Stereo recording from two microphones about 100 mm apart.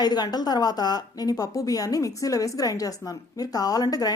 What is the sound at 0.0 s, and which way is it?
A woman's voice, 45° left (ahead or behind).